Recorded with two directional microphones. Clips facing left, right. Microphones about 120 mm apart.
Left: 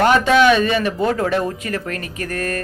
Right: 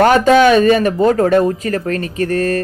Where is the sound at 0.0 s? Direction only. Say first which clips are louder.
Right 4 dB; 40° right (ahead or behind).